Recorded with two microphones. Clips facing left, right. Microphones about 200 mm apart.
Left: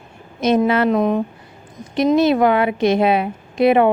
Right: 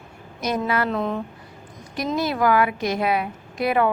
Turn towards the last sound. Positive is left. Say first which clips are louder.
# left 7 dB
turn(degrees=25)  # may be behind; listen again after turning